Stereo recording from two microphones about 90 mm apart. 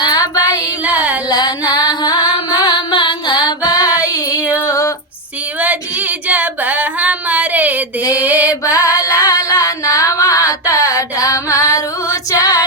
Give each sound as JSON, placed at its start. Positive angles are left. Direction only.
{"t": 0.0, "sound": "female singing", "side_deg": 45}
{"t": 0.9, "sound": "a sound", "side_deg": -15}
{"t": 1.3, "sound": "music", "side_deg": 55}
{"t": 4.6, "sound": "female singing", "side_deg": 35}
{"t": 5.5, "sound": "singing", "side_deg": -15}
{"t": 8.6, "sound": "singing", "side_deg": 35}
{"t": 12.1, "sound": "female singing", "side_deg": 40}